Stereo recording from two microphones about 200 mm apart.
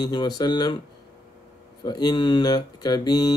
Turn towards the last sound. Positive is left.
turn(degrees=20)  # may be behind; listen again after turning